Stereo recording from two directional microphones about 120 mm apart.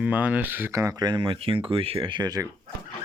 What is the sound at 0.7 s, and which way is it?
Speech, 30° right (ahead or behind).